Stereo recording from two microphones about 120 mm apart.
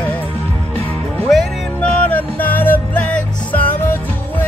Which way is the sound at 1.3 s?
10° left (ahead or behind).